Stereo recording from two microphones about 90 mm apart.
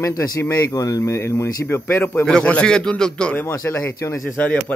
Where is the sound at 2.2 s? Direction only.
10° left (ahead or behind).